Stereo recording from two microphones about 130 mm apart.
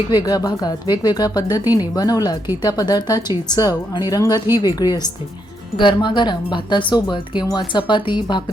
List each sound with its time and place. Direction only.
0.1 s speech: 30° left (ahead or behind)